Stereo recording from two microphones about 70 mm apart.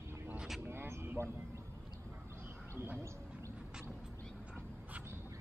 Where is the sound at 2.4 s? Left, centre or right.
Right.